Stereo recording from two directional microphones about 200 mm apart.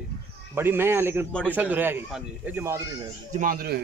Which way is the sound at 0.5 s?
10° right (ahead or behind).